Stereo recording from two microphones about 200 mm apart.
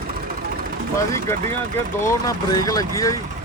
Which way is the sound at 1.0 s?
15° left (ahead or behind).